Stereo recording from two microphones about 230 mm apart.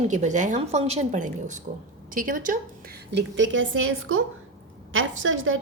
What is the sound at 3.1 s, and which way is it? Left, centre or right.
A woman's voice, right.